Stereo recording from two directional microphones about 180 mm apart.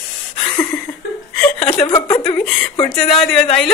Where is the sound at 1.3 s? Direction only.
10° left (ahead or behind).